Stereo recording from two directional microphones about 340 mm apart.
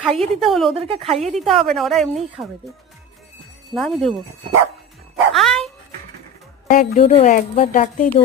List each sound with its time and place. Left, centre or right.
0.0 s a woman's voice: centre
0.7 s speech: centre
1.3 s a woman's voice: centre
3.8 s a woman's voice: centre
5.3 s dog: centre
6.7 s a woman's voice: left